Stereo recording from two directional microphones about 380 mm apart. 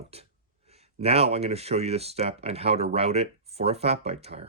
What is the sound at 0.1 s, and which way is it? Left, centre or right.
Speech, centre.